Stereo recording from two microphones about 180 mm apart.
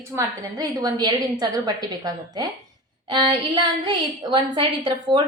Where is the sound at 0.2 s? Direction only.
20° right (ahead or behind).